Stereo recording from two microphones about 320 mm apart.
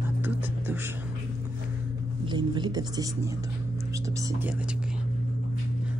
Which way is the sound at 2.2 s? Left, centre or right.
Centre.